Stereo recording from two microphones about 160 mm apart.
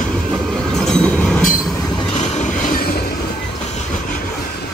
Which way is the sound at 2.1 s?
45° left (ahead or behind).